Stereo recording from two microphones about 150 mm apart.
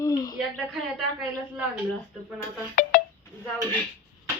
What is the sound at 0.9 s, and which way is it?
Speech, 5° right (ahead or behind).